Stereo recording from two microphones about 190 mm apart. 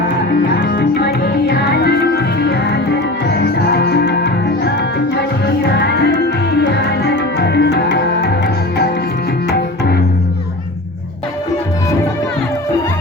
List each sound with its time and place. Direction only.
0.5 s music: 55° left (ahead or behind)